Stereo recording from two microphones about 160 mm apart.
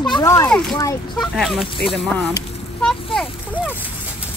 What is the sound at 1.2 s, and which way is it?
Speech, centre (ahead or behind).